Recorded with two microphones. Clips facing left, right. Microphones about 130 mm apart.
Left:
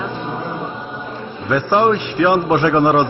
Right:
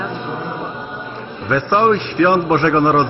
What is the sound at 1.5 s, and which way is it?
A man's voice, 5° left (ahead or behind).